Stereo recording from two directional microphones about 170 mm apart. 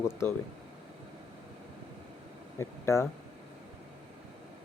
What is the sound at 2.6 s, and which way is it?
Speech, 15° left (ahead or behind).